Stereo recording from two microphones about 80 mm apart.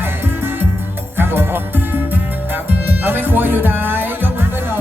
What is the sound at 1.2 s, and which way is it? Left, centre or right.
Music, right.